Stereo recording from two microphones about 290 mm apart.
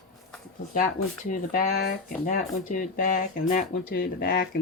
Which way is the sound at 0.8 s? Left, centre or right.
Left.